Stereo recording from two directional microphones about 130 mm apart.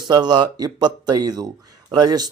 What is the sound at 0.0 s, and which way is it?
Speech, 35° right (ahead or behind).